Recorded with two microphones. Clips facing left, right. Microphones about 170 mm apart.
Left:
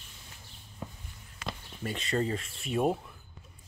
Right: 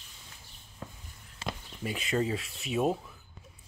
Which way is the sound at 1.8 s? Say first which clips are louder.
Right 1 dB; 5° right (ahead or behind).